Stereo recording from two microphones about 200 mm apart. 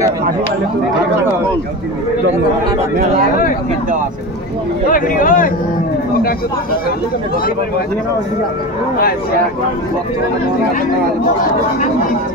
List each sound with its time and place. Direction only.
4.8 s speech: 45° left (ahead or behind)